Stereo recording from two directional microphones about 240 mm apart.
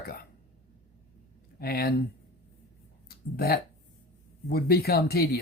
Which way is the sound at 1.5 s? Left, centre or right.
Left.